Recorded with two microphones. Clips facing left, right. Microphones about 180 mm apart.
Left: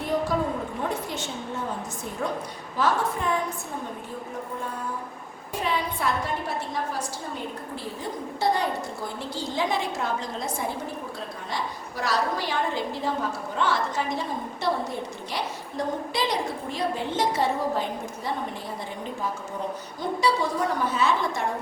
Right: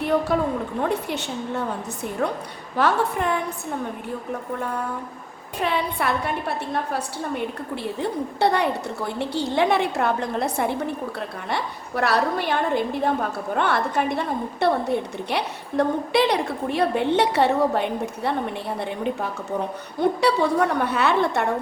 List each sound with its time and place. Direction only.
0.3 s a woman's voice: 65° right (ahead or behind)
2.2 s a woman's voice: 65° right (ahead or behind)
5.6 s a woman's voice: 65° right (ahead or behind)